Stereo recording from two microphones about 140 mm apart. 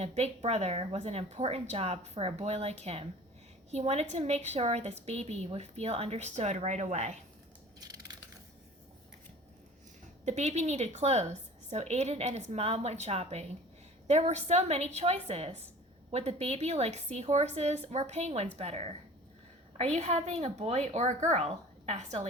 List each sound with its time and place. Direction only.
0.0 s a woman's voice: 50° right (ahead or behind)
7.8 s crushing: 25° right (ahead or behind)
10.2 s a woman's voice: 55° right (ahead or behind)